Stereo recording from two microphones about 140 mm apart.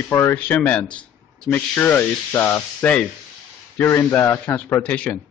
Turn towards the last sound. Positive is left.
turn(degrees=10)  # may be behind; listen again after turning